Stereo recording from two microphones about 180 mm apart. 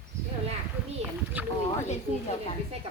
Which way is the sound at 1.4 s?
10° right (ahead or behind).